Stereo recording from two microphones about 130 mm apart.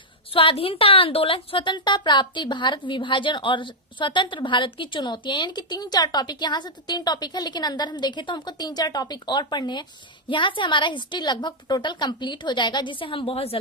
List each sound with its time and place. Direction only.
0.3 s a woman's voice: 45° left (ahead or behind)